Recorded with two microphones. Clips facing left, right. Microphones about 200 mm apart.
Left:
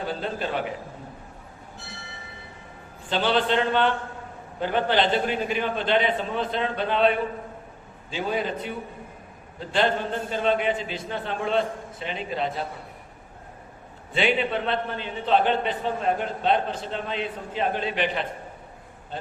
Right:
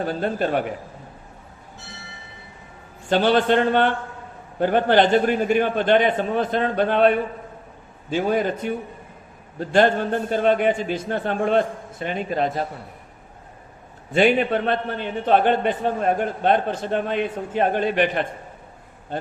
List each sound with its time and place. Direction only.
0.0 s a man's voice: 50° right (ahead or behind)
3.1 s a man's voice: 45° right (ahead or behind)
8.1 s a man's voice: 50° right (ahead or behind)
14.1 s a man's voice: 45° right (ahead or behind)